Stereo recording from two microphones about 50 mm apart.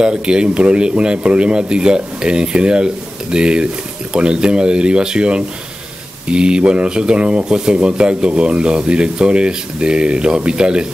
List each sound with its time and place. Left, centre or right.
0.0 s speech: centre